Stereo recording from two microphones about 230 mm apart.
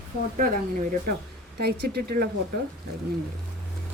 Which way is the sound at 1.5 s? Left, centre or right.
Right.